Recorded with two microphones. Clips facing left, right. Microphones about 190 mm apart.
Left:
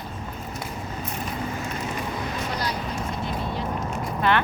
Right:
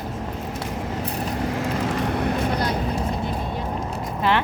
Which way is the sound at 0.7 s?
90° right.